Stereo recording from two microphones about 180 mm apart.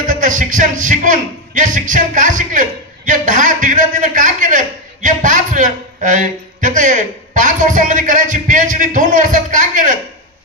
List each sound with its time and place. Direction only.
0.0 s a man's voice: 45° right (ahead or behind)